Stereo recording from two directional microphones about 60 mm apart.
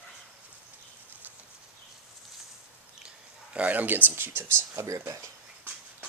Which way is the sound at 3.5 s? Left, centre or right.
Right.